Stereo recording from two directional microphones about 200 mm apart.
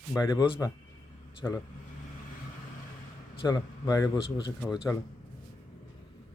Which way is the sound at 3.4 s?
20° left (ahead or behind).